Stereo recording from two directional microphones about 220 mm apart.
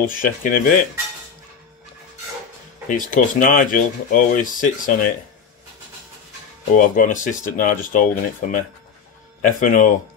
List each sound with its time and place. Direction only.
0.0 s speech: 40° left (ahead or behind)
3.0 s speech: 35° left (ahead or behind)
6.7 s speech: 35° left (ahead or behind)